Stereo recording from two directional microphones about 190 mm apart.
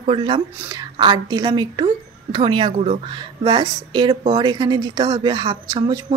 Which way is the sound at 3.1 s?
25° right (ahead or behind).